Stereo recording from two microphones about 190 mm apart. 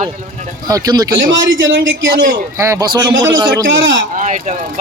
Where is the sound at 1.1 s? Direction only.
80° right.